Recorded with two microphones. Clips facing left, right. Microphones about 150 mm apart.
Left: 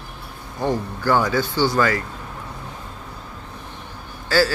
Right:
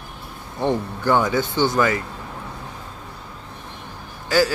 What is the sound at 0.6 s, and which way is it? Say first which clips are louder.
Speech: right 1 dB; 20° right (ahead or behind).